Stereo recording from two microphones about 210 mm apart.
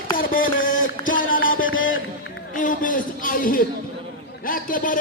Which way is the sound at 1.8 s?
45° left (ahead or behind).